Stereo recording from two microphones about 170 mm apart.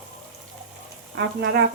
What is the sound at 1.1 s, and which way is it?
Speech, 85° right.